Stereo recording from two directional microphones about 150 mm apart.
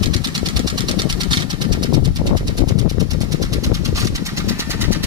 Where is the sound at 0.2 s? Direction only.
25° right (ahead or behind).